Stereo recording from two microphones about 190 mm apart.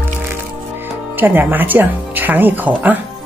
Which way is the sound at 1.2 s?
10° right (ahead or behind).